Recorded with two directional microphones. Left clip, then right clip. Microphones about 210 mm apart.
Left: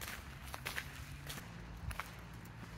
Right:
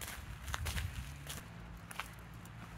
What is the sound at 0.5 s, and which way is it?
Walk, 5° left (ahead or behind).